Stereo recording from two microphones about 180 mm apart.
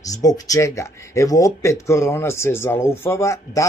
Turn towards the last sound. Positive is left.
turn(degrees=15)  # may be behind; listen again after turning